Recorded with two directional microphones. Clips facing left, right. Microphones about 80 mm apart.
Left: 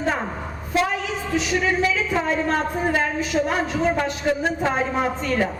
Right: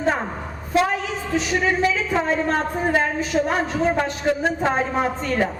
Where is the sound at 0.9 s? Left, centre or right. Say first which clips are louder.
Right 1 dB; right.